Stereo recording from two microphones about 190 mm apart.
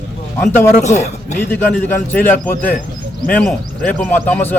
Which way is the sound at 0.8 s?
35° left (ahead or behind).